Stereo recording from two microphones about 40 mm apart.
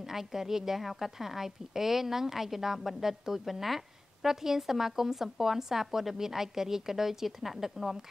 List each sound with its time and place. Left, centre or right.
0.1 s a woman's voice: centre